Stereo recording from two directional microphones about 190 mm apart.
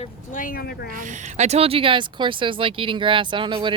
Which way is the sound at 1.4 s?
35° right (ahead or behind).